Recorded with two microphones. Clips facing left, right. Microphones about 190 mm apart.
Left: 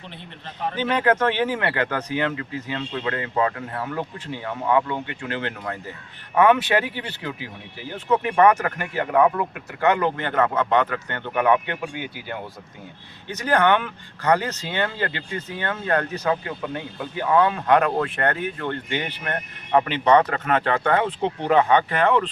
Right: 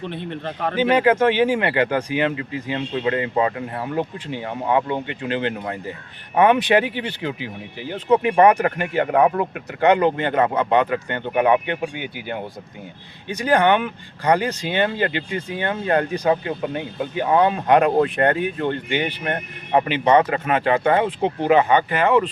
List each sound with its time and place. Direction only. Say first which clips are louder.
0.1 s speech: right 12 dB; 60° right (ahead or behind)
0.8 s speech: right 4 dB; 10° right (ahead or behind)
19.9 s speech: right 2 dB; 10° right (ahead or behind)